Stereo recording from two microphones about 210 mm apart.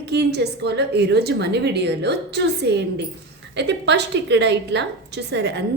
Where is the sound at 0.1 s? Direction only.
50° right (ahead or behind).